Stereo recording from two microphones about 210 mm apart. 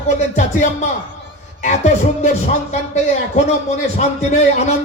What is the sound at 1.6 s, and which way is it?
Speech, 35° left (ahead or behind).